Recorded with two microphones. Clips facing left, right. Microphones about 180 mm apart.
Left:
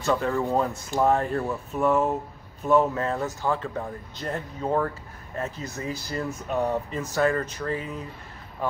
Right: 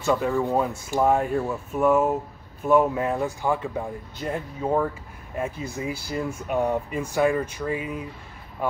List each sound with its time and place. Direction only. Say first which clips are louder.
0.0 s speech: right 2 dB; 10° right (ahead or behind)